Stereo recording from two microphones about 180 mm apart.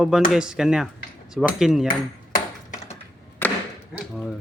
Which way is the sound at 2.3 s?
45° left (ahead or behind).